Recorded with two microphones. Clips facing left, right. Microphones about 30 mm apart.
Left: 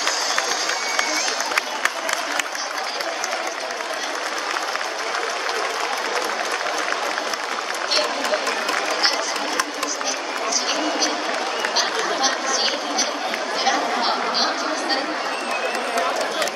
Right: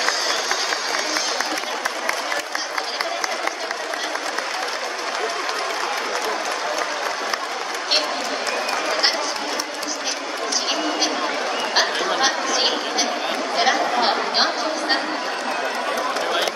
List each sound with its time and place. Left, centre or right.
11.7 s chatter: centre